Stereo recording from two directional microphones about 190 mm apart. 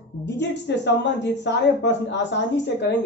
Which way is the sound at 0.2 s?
65° left (ahead or behind).